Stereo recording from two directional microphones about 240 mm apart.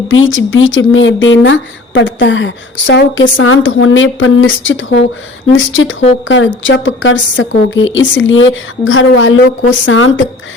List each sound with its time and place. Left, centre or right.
0.1 s a woman's voice: left